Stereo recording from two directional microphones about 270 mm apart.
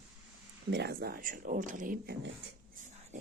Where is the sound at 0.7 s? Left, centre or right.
Right.